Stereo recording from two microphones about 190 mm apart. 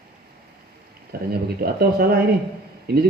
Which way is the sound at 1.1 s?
55° right (ahead or behind).